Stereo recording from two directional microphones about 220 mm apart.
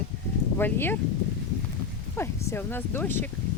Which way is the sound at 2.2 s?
10° left (ahead or behind).